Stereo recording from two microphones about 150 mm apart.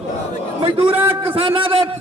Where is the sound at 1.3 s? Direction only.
40° right (ahead or behind).